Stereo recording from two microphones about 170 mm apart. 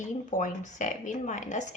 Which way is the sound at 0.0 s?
50° left (ahead or behind).